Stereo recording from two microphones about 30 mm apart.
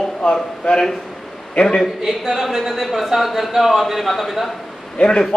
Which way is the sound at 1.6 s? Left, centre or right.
Left.